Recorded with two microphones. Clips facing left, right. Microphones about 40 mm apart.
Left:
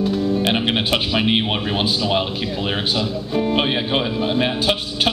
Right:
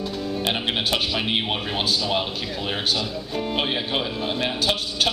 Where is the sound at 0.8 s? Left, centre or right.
Left.